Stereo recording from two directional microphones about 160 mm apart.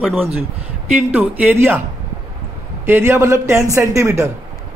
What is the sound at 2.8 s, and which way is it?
A man's voice, 15° right (ahead or behind).